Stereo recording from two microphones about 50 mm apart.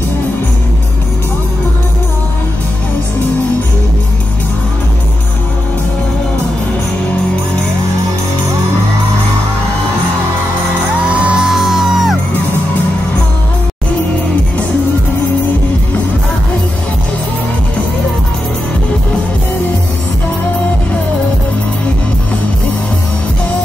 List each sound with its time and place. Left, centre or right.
11.1 s music: right
11.4 s music: centre